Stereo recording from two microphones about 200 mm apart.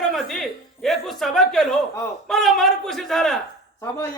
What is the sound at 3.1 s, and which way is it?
Speech, centre (ahead or behind).